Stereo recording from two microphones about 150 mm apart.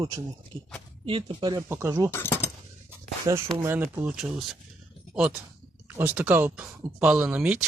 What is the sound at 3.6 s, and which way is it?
Speech, 15° right (ahead or behind).